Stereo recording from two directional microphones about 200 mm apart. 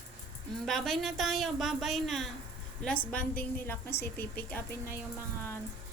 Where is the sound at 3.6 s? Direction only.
10° left (ahead or behind).